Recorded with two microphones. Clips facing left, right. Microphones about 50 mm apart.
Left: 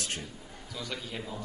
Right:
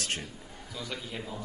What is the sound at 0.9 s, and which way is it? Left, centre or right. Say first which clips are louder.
Speech: even; centre.